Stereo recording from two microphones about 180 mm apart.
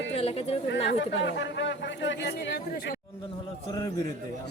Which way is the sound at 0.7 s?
80° left.